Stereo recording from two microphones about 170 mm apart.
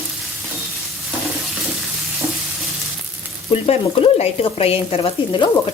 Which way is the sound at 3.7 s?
35° left (ahead or behind).